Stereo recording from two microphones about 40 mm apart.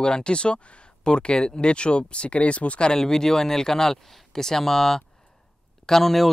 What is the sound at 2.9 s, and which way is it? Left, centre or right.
Speech, centre.